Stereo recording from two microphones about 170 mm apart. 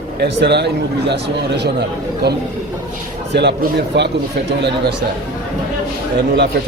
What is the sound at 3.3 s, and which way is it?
Speech, 85° right.